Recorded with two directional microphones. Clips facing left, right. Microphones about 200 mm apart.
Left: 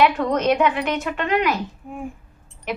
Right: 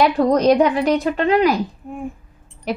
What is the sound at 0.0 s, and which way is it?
Speech, 35° right (ahead or behind).